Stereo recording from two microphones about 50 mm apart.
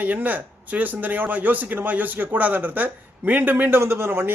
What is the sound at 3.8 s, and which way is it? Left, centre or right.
Speech, right.